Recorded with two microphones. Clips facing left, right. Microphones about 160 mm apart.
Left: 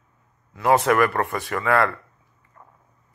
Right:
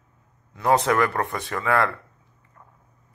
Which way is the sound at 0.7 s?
20° right (ahead or behind).